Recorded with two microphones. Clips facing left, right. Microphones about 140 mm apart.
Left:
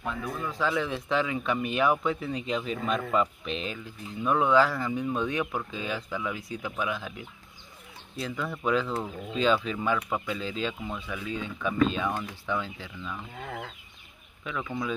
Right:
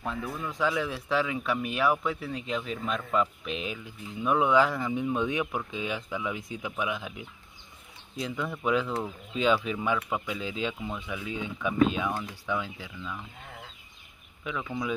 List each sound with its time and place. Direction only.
0.0 s speech: 30° right (ahead or behind)
0.7 s speech: 5° right (ahead or behind)
13.4 s chicken: 80° left
14.5 s speech: 15° right (ahead or behind)